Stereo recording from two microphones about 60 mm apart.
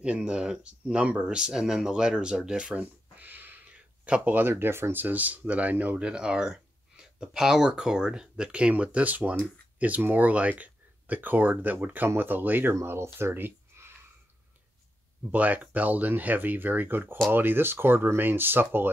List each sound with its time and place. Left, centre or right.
0.0 s speech: centre
2.8 s a sound: right
4.0 s speech: right
6.0 s speech: centre; by 12.7 s right
12.8 s speech: right
15.3 s speech: right